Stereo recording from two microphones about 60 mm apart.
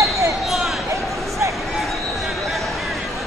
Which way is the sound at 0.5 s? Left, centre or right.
Centre.